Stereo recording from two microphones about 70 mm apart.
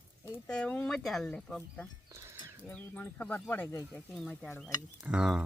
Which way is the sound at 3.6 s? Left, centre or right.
Left.